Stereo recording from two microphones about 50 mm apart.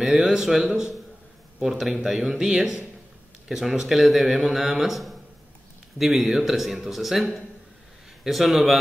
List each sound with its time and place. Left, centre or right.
0.2 s speech: centre
1.6 s speech: centre